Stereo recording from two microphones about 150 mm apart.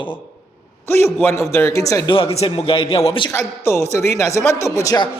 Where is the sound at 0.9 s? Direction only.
15° left (ahead or behind).